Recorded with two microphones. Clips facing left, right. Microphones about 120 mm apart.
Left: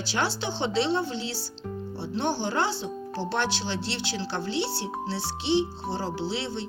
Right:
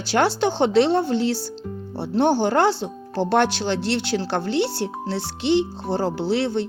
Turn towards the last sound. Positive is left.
turn(degrees=-55)  # may be behind; listen again after turning